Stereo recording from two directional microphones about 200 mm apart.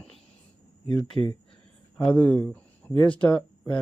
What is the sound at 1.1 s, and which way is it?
Speech, 25° right (ahead or behind).